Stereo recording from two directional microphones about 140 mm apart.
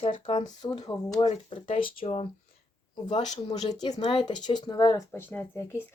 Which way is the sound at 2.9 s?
30° left (ahead or behind).